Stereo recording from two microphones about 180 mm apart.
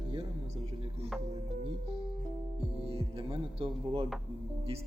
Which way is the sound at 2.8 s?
30° right (ahead or behind).